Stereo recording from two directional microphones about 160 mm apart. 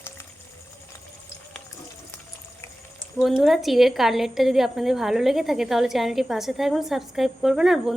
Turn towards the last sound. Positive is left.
turn(degrees=0)  # may be behind; listen again after turning